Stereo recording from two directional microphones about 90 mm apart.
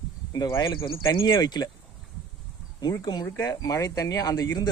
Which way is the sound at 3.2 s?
35° left (ahead or behind).